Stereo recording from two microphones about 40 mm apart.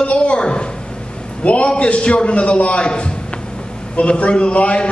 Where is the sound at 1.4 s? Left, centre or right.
Left.